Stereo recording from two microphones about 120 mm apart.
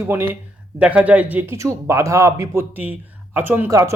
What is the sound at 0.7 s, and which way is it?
Speech, 10° right (ahead or behind).